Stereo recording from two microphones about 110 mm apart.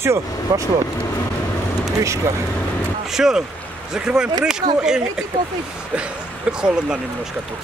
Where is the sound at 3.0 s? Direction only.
5° right (ahead or behind).